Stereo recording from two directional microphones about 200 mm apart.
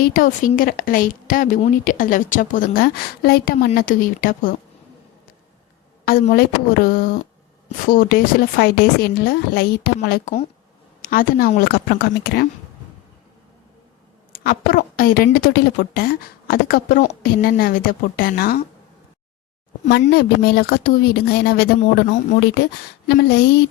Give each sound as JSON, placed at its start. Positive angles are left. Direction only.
{"t": 0.0, "sound": "speech", "side_deg": 45}
{"t": 6.1, "sound": "speech", "side_deg": 45}
{"t": 14.4, "sound": "speech", "side_deg": 45}
{"t": 19.9, "sound": "a woman's voice", "side_deg": 55}